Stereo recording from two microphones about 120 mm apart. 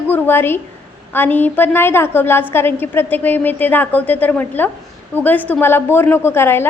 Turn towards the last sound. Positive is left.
turn(degrees=20)  # may be behind; listen again after turning